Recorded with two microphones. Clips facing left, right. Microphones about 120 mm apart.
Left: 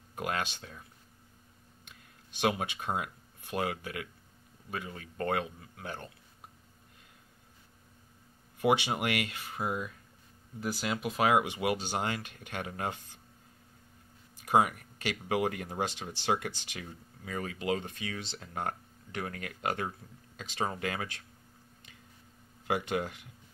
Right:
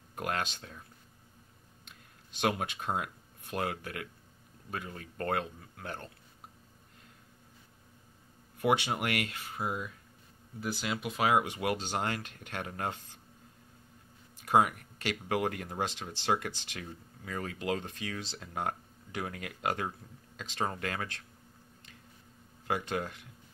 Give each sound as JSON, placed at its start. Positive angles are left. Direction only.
{"t": 0.1, "sound": "speech", "side_deg": 0}
{"t": 2.4, "sound": "speech", "side_deg": 5}
{"t": 8.5, "sound": "speech", "side_deg": 10}
{"t": 10.6, "sound": "speech", "side_deg": 25}
{"t": 11.3, "sound": "speech", "side_deg": 10}
{"t": 14.4, "sound": "speech", "side_deg": 0}